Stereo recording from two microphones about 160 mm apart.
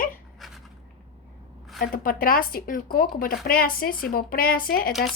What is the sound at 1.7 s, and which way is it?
A woman's voice, 65° left (ahead or behind).